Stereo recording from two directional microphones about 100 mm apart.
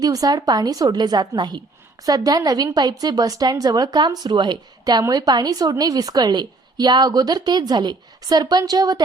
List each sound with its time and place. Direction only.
0.0 s a woman's voice: 40° right (ahead or behind)